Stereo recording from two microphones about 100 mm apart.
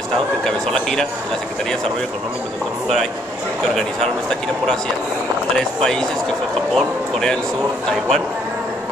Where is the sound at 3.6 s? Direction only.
5° left (ahead or behind).